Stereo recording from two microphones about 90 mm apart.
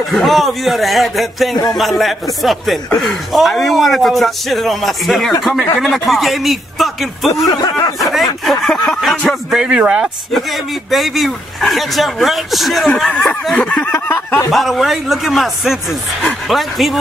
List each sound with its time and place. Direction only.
0.1 s a man's voice: centre (ahead or behind)
8.5 s music: centre (ahead or behind)
9.5 s a man's voice: 5° right (ahead or behind)
13.6 s a sound: 15° left (ahead or behind)
13.9 s snicker: 20° left (ahead or behind)
14.5 s a man's voice: centre (ahead or behind)